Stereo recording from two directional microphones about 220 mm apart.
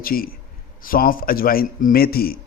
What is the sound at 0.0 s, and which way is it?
A man's voice, 40° left (ahead or behind).